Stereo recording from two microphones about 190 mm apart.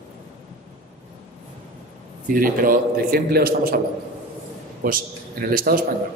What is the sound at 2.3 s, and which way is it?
A man's voice, 45° right (ahead or behind).